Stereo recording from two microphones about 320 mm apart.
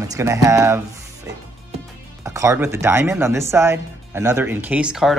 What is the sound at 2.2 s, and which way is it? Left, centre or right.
Speech, centre.